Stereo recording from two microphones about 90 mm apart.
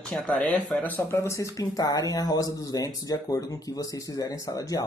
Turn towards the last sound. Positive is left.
turn(degrees=45)  # may be behind; listen again after turning